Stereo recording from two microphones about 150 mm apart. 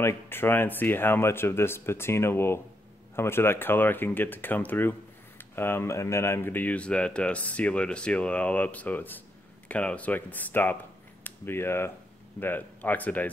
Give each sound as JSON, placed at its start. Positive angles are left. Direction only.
{"t": 0.0, "sound": "speech", "side_deg": 15}